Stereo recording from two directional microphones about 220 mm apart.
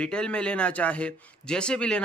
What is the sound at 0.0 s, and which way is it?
A man's voice, 5° left (ahead or behind).